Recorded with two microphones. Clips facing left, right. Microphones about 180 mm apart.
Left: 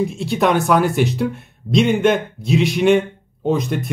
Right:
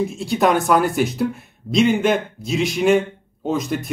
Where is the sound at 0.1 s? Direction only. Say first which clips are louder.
Even; centre (ahead or behind).